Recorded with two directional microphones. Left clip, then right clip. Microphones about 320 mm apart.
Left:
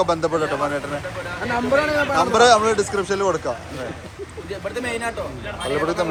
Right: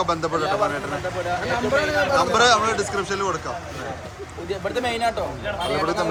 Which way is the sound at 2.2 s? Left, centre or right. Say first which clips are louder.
Left 4 dB; centre.